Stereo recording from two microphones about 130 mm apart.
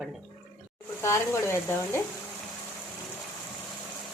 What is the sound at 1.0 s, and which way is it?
Speech, 20° left (ahead or behind).